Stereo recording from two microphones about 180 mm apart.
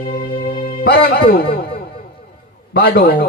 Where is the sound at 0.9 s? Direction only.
55° left (ahead or behind).